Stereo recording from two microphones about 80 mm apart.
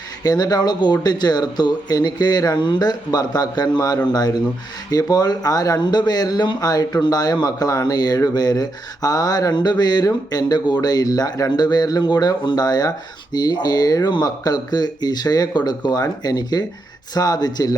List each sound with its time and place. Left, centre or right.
0.2 s speech: left
2.6 s speech: left